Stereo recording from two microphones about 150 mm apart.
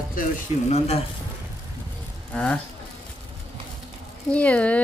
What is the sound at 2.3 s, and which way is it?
Speech, 5° left (ahead or behind).